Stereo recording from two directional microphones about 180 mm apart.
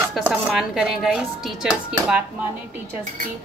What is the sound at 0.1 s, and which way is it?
A woman's voice, centre (ahead or behind).